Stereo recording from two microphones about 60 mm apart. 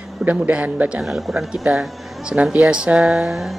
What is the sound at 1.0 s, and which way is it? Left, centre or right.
Speech, centre.